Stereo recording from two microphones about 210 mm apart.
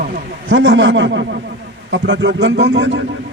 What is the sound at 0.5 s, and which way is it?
A man's voice, 60° right (ahead or behind).